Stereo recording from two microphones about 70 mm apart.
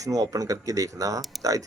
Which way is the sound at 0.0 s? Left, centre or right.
Right.